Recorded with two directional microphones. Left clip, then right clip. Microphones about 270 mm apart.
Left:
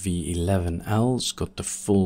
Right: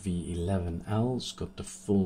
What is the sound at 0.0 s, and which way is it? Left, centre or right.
Speech, left.